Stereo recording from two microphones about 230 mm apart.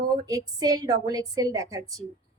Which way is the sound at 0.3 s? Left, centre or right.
Centre.